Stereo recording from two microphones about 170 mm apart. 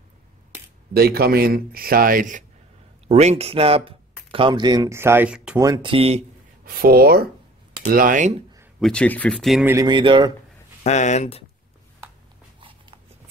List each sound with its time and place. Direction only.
0.9 s speech: 65° right (ahead or behind)
3.1 s speech: 40° right (ahead or behind); by 5.6 s 5° right (ahead or behind)
5.6 s speech: 25° right (ahead or behind)
6.6 s speech: 60° right (ahead or behind); by 8.5 s 45° right (ahead or behind)
8.7 s speech: 5° left (ahead or behind)
9.7 s speech: 20° right (ahead or behind)
10.8 s speech: 40° left (ahead or behind)
12.5 s a sound: 30° right (ahead or behind)